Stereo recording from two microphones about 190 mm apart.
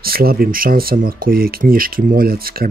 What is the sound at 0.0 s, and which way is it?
Speech, 50° right (ahead or behind).